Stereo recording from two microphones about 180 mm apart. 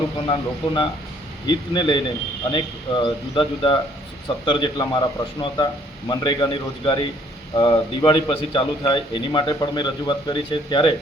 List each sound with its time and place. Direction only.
0.3 s a man's voice: 30° left (ahead or behind)